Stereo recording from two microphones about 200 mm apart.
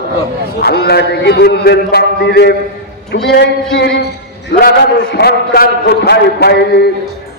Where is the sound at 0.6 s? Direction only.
55° left (ahead or behind).